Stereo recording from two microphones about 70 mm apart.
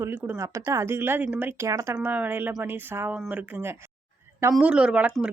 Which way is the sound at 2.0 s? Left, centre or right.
Right.